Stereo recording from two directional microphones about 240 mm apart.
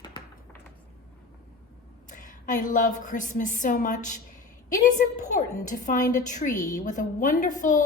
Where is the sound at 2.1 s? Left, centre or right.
Left.